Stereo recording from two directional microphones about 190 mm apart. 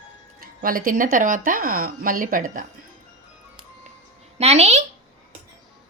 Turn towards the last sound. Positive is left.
turn(degrees=-35)  # may be behind; listen again after turning